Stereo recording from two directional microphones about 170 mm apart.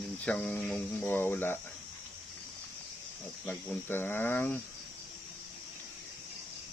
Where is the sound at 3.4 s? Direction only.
10° left (ahead or behind).